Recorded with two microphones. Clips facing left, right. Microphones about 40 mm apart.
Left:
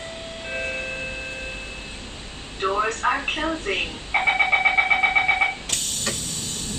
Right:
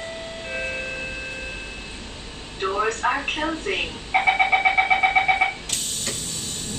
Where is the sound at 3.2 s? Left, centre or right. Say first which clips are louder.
Even; centre.